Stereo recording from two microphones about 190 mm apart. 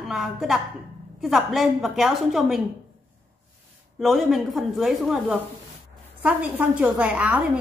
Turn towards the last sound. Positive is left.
turn(degrees=-5)  # may be behind; listen again after turning